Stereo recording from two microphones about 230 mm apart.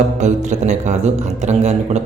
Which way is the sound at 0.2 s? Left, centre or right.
Right.